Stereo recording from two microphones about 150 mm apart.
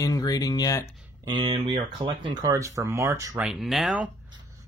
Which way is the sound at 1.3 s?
35° right (ahead or behind).